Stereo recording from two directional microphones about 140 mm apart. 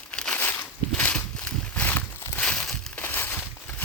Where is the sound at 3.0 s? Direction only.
15° left (ahead or behind).